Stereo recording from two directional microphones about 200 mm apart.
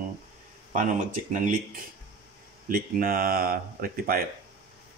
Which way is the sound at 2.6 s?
45° right (ahead or behind).